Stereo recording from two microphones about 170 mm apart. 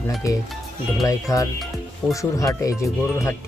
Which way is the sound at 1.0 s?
20° left (ahead or behind).